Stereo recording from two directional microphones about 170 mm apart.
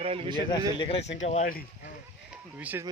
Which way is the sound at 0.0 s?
35° right (ahead or behind).